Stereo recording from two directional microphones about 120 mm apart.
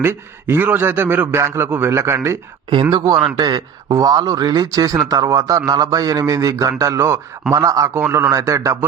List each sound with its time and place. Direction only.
0.0 s speech: 20° right (ahead or behind)
2.9 s a man's voice: 35° right (ahead or behind)